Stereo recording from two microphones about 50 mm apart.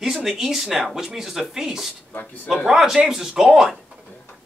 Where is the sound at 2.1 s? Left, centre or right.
Left.